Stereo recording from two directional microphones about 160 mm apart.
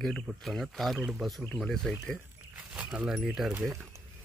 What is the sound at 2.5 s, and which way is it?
Speech, 10° right (ahead or behind).